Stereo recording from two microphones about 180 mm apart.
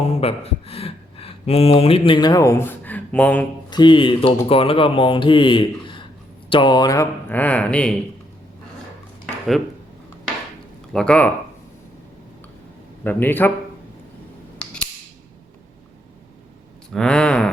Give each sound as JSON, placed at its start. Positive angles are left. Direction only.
{"t": 0.0, "sound": "speech", "side_deg": 35}
{"t": 3.7, "sound": "speech", "side_deg": 25}
{"t": 10.9, "sound": "speech", "side_deg": 5}
{"t": 13.1, "sound": "speech", "side_deg": 10}
{"t": 14.6, "sound": "cap gun", "side_deg": 5}
{"t": 16.9, "sound": "speech", "side_deg": 5}